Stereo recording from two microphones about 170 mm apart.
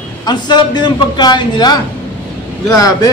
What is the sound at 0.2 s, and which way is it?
A man's voice, 25° left (ahead or behind).